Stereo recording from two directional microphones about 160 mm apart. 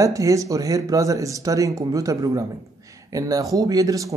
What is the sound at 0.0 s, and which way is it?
Speech, 20° right (ahead or behind).